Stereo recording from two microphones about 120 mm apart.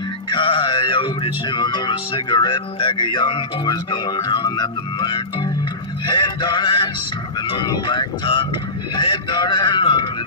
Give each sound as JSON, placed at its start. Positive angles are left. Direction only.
{"t": 0.3, "sound": "music", "side_deg": 45}
{"t": 4.5, "sound": "a man's voice", "side_deg": 40}